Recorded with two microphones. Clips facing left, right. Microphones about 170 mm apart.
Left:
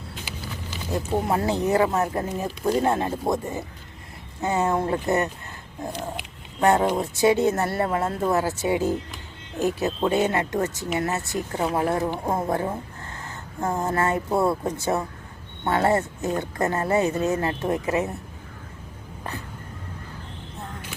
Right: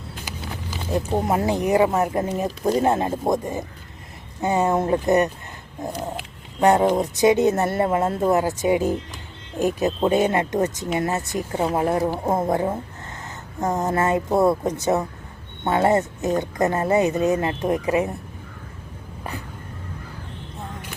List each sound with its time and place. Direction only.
0.9 s speech: 20° right (ahead or behind)
6.6 s speech: 20° right (ahead or behind)